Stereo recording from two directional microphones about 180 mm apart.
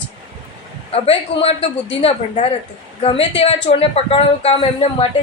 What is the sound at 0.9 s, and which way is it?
Speech, 35° left (ahead or behind).